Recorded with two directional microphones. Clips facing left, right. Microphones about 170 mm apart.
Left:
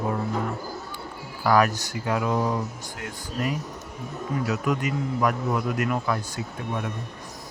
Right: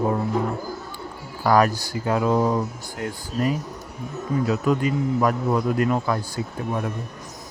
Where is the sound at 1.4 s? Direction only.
35° right (ahead or behind).